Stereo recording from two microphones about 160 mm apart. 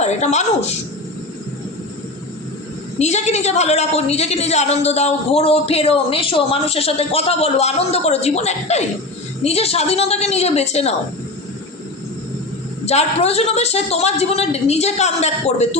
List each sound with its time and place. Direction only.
0.0 s a woman's voice: 45° left (ahead or behind)
3.0 s a woman's voice: 45° left (ahead or behind)
12.8 s a woman's voice: 40° left (ahead or behind)